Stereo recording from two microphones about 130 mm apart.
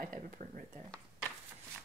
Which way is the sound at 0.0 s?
90° right.